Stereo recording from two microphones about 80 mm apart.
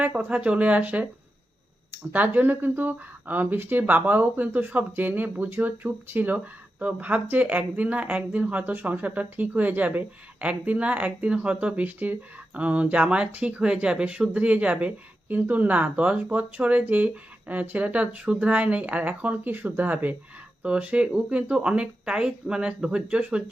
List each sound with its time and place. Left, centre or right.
0.0 s speech: right